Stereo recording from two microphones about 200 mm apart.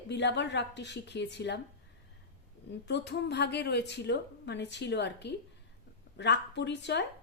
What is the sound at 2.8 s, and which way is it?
A woman's voice, 60° left (ahead or behind).